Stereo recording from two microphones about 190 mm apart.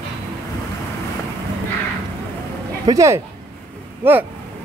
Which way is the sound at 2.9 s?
15° right (ahead or behind).